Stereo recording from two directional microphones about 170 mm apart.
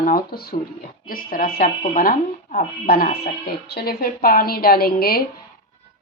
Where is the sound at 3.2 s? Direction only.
70° left (ahead or behind).